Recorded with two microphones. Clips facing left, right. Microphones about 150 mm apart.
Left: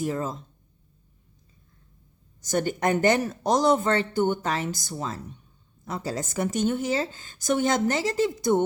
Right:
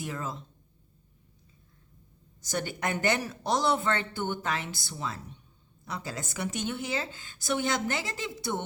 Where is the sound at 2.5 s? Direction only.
45° left (ahead or behind).